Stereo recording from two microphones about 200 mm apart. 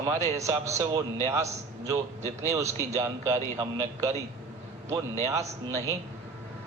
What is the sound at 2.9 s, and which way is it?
A man's voice, 15° right (ahead or behind).